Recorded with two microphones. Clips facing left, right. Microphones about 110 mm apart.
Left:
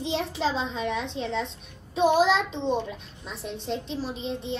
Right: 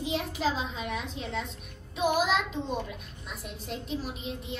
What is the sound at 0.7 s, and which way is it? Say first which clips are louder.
A woman's voice: left 6 dB; 30° left (ahead or behind).